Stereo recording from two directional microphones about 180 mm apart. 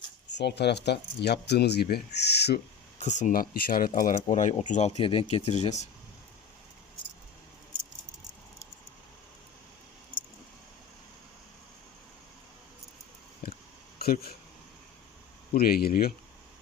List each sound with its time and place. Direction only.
0.3 s speech: 70° left (ahead or behind)
3.0 s speech: 40° left (ahead or behind)
13.4 s a sound: 55° left (ahead or behind)
14.0 s speech: 55° left (ahead or behind)
15.5 s speech: 55° left (ahead or behind)